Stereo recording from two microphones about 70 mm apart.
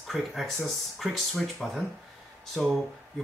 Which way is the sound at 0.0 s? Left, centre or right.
Centre.